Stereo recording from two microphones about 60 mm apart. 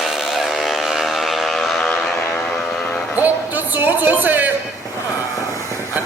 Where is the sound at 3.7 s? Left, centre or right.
Right.